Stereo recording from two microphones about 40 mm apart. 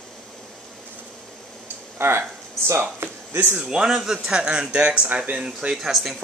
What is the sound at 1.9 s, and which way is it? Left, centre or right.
Speech, right.